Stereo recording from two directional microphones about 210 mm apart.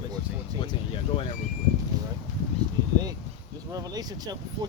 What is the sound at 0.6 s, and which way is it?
Speech, 25° left (ahead or behind).